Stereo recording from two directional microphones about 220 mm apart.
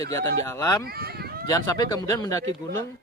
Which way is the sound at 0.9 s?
45° right (ahead or behind).